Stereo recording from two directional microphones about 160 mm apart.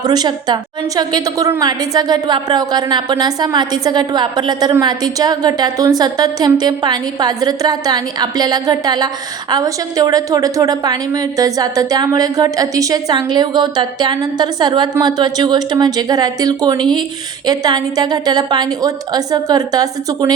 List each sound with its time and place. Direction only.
0.0 s a woman's voice: 25° right (ahead or behind)